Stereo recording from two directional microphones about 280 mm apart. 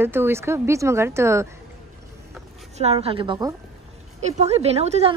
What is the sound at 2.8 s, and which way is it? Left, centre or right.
Speech, right.